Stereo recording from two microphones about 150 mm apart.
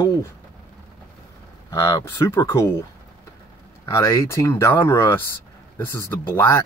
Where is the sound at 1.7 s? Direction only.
20° left (ahead or behind).